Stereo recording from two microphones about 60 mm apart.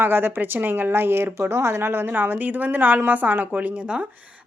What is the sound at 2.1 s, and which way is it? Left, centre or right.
A woman's voice, right.